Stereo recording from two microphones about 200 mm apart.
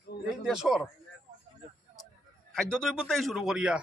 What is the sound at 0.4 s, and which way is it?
Speech, 5° right (ahead or behind).